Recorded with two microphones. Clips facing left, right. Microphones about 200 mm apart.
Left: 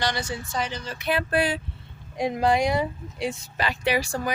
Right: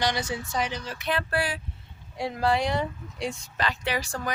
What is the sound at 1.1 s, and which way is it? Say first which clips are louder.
Speech: left 5 dB; 20° left (ahead or behind).